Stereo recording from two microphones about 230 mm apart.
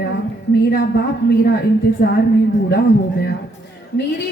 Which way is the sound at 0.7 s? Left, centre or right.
Left.